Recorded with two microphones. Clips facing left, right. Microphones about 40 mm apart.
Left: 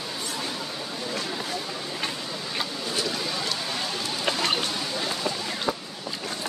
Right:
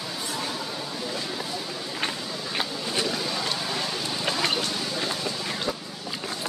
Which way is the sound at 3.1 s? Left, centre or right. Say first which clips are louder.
Right 1 dB; centre.